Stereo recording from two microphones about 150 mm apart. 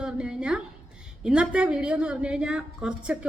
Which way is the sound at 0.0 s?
5° right (ahead or behind).